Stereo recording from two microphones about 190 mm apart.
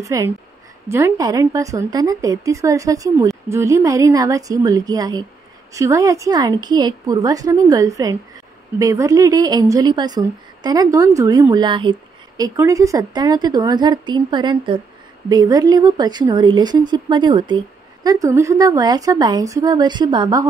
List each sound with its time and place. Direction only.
0.0 s a woman's voice: 15° right (ahead or behind)